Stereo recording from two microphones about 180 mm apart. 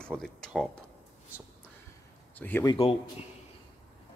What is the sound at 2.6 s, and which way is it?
Speech, 25° left (ahead or behind).